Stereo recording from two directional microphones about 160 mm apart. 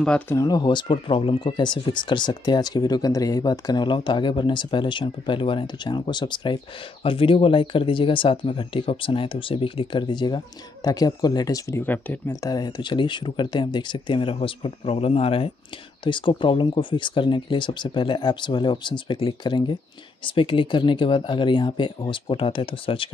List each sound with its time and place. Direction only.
0.0 s speech: 5° left (ahead or behind)
0.4 s speech: 25° left (ahead or behind)
12.4 s speech: 25° left (ahead or behind)